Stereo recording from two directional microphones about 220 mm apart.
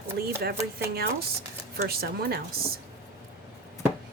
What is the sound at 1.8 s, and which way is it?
Speech, 45° right (ahead or behind).